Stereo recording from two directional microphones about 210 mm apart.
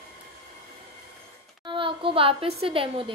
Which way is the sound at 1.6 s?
25° right (ahead or behind).